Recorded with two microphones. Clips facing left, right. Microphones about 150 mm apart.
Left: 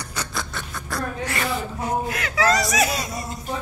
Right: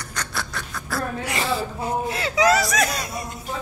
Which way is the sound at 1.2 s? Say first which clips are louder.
Right 1 dB; 25° right (ahead or behind).